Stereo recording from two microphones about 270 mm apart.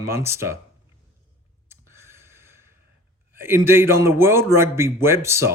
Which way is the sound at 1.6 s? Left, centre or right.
Centre.